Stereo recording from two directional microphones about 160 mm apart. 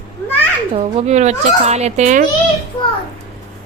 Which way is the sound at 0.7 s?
40° right (ahead or behind).